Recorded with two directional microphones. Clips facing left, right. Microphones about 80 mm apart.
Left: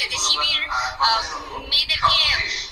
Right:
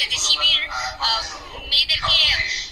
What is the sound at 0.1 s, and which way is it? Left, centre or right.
Music, left.